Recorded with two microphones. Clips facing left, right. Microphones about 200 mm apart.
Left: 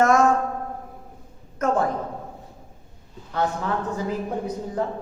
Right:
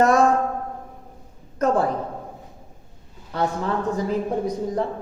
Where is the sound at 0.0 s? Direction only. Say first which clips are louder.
Right 1 dB; 35° right (ahead or behind).